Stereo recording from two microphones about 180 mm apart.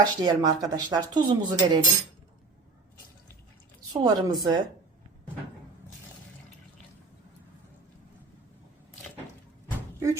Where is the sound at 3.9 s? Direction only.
20° right (ahead or behind).